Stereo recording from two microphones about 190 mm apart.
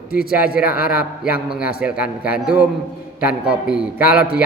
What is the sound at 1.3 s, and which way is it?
A man's voice, 5° right (ahead or behind).